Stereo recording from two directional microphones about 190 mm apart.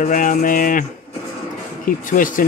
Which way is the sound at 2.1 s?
45° left (ahead or behind).